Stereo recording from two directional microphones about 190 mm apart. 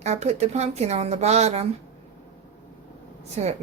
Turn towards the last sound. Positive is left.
turn(degrees=-35)  # may be behind; listen again after turning